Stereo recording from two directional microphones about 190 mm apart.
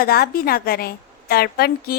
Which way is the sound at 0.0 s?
50° left (ahead or behind).